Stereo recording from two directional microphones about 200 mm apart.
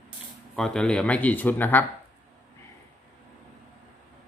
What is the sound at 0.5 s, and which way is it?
Speech, 5° left (ahead or behind).